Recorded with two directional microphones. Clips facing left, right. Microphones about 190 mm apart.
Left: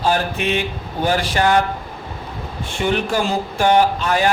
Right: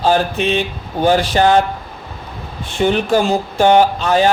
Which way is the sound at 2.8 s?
20° right (ahead or behind).